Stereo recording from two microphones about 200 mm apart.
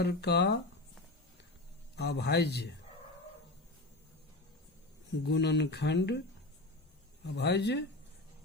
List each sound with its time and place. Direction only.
0.0 s speech: 55° left (ahead or behind)
2.0 s speech: 55° left (ahead or behind)
5.3 s speech: 60° left (ahead or behind)
7.3 s speech: 60° left (ahead or behind)